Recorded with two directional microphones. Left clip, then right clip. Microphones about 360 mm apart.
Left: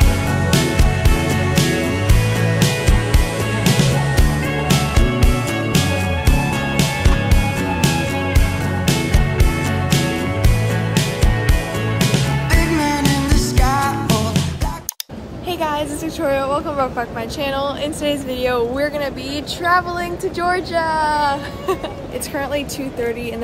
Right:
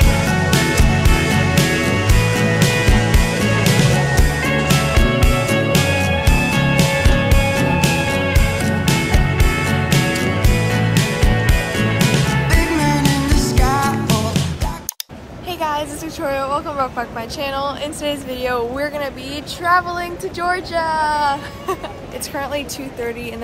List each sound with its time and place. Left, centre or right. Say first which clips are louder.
0.0 s music: right 3 dB; centre
15.6 s a sound: even; centre
17.4 s child singing: left 1 dB; centre